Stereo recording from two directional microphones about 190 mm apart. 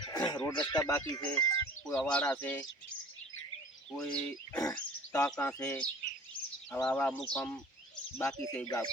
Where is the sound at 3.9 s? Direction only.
5° left (ahead or behind).